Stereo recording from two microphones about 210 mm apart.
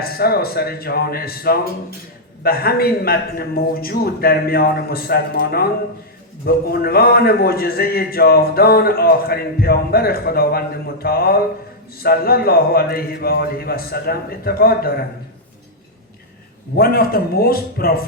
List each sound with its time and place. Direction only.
0.0 s a man's voice: 45° left (ahead or behind)
16.7 s a man's voice: 45° left (ahead or behind)